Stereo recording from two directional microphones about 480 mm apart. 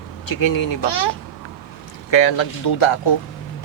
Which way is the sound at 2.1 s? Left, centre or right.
Left.